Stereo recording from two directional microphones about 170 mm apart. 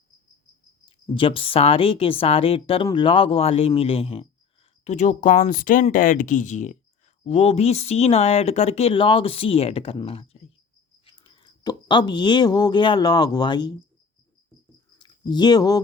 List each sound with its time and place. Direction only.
0.9 s speech: 30° left (ahead or behind)
14.9 s speech: 25° left (ahead or behind)